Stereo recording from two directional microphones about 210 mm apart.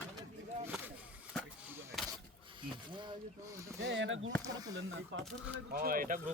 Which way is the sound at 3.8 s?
60° right (ahead or behind).